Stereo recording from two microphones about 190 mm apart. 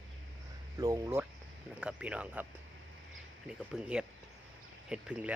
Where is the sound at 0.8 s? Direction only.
20° right (ahead or behind).